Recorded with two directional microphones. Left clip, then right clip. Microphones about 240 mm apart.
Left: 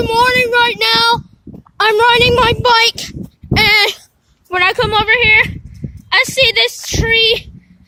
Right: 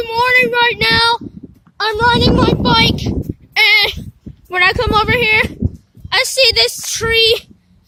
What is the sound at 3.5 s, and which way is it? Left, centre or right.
Bleat, left.